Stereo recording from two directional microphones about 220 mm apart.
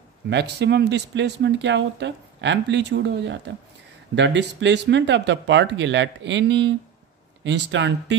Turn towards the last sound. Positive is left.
turn(degrees=-55)  # may be behind; listen again after turning